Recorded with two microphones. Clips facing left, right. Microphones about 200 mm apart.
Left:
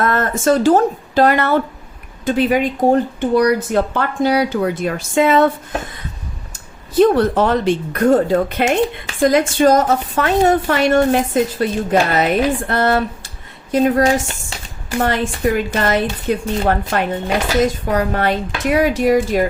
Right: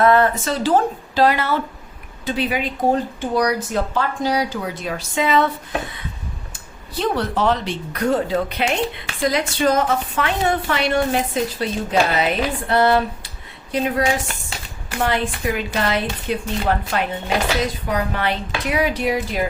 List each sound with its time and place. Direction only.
0.0 s speech: 45° left (ahead or behind)
7.0 s speech: 50° left (ahead or behind)